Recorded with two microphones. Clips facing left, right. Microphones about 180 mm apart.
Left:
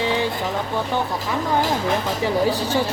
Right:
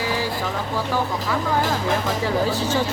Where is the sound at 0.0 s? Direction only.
25° left (ahead or behind).